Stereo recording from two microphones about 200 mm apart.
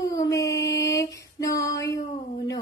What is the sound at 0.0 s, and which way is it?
Mantra, 15° left (ahead or behind).